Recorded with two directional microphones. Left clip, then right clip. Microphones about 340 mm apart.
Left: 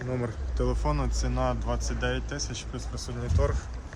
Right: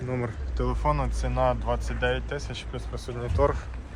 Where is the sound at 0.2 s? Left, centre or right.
Centre.